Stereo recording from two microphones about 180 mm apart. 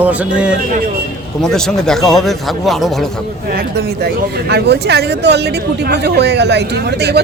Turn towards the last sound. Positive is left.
turn(degrees=-65)  # may be behind; listen again after turning